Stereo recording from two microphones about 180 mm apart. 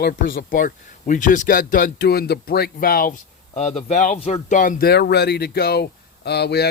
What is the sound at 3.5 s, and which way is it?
Speech, 40° left (ahead or behind).